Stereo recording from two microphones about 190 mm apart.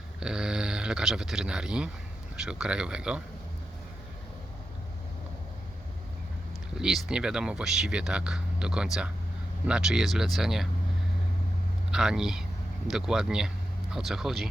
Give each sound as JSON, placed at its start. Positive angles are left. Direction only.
{"t": 0.2, "sound": "speech", "side_deg": -5}
{"t": 6.7, "sound": "speech", "side_deg": 0}
{"t": 11.9, "sound": "speech", "side_deg": -5}